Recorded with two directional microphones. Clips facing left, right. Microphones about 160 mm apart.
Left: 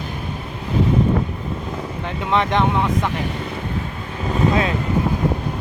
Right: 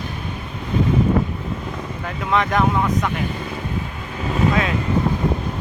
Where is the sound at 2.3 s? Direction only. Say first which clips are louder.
Even; 30° left (ahead or behind).